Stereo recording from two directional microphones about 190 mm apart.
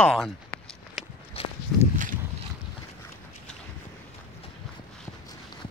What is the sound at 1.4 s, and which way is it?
Walk, 30° left (ahead or behind).